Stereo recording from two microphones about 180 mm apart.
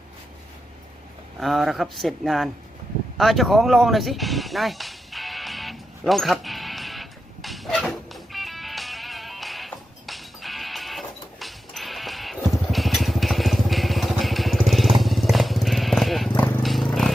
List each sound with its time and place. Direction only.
1.4 s speech: centre (ahead or behind)
3.2 s a sound: centre (ahead or behind)
14.7 s vehicle: centre (ahead or behind)
15.0 s motorcycle: centre (ahead or behind)
16.4 s vehicle: centre (ahead or behind)